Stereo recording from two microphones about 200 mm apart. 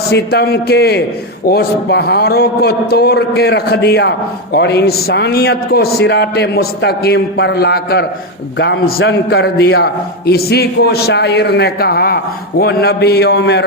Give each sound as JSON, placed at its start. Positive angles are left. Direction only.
{"t": 0.1, "sound": "a man's voice", "side_deg": 55}